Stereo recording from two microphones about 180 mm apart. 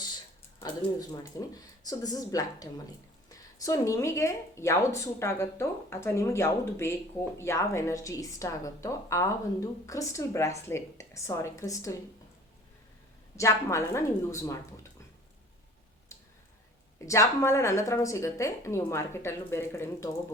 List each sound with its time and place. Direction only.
0.9 s a woman's voice: 20° left (ahead or behind)
13.3 s a woman's voice: 15° left (ahead or behind)
17.1 s a woman's voice: 15° left (ahead or behind)